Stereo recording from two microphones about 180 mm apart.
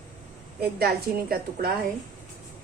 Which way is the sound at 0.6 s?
60° right (ahead or behind).